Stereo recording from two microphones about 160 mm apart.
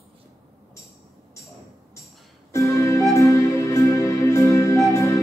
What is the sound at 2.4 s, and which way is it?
Music, 20° left (ahead or behind).